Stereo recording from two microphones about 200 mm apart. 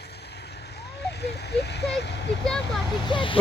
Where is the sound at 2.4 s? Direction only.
5° left (ahead or behind).